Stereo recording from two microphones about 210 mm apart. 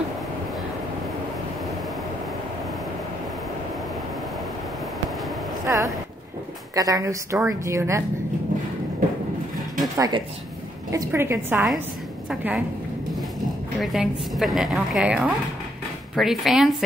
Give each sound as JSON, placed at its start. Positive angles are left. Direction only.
{"t": 5.7, "sound": "a sound", "side_deg": -15}
{"t": 6.7, "sound": "a woman's voice", "side_deg": -15}
{"t": 9.9, "sound": "a woman's voice", "side_deg": -20}
{"t": 13.7, "sound": "a woman's voice", "side_deg": 0}